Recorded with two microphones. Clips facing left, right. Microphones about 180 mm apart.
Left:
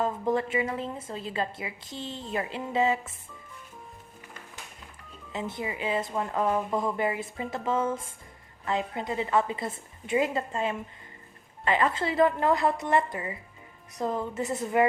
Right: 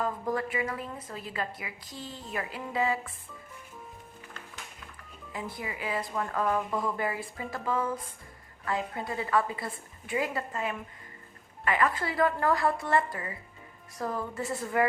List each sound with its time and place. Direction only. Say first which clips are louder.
0.0 s a woman's voice: left 4 dB; 25° left (ahead or behind)
5.3 s a woman's voice: left 4 dB; 25° left (ahead or behind)